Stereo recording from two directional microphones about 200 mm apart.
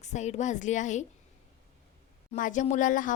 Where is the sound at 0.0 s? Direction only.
35° left (ahead or behind).